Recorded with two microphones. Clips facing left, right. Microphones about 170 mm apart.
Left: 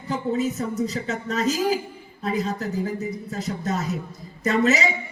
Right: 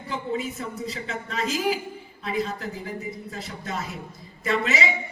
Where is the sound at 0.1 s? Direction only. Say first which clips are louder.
Left 5 dB; 40° left (ahead or behind).